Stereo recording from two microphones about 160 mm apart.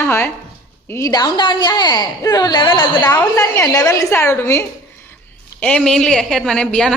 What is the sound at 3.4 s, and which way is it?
A woman's voice, 25° left (ahead or behind).